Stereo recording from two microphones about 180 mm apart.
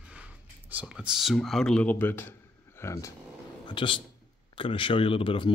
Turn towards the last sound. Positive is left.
turn(degrees=30)  # may be behind; listen again after turning